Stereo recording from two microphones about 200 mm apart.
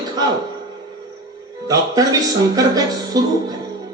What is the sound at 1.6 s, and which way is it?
A man's voice, 15° right (ahead or behind).